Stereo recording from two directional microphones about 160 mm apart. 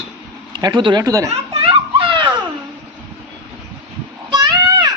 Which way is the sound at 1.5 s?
35° right (ahead or behind).